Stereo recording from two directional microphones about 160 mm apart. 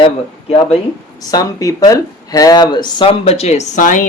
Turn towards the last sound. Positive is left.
turn(degrees=50)  # may be behind; listen again after turning